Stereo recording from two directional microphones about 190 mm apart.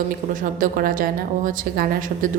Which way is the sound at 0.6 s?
45° right (ahead or behind).